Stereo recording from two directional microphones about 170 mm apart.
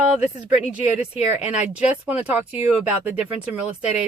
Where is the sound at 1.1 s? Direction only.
10° right (ahead or behind).